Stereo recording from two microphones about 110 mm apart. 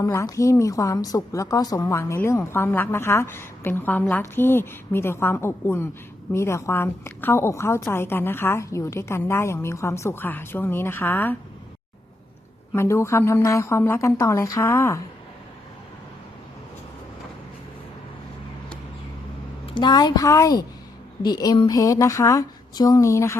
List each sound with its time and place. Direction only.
0.0 s a woman's voice: 30° left (ahead or behind)
12.7 s a woman's voice: 25° left (ahead or behind)
19.6 s a woman's voice: 45° left (ahead or behind); by 23.4 s 30° left (ahead or behind)